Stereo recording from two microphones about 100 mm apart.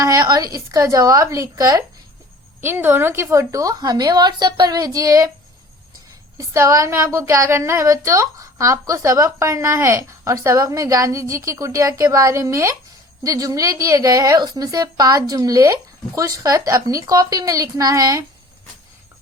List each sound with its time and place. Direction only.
0.0 s speech: 35° right (ahead or behind)
2.6 s speech: 20° right (ahead or behind)
6.3 s speech: 30° right (ahead or behind)